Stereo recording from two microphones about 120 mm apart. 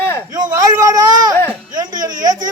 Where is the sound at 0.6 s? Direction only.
35° right (ahead or behind).